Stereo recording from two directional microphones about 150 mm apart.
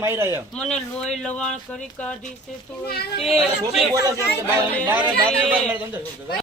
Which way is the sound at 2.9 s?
45° left (ahead or behind).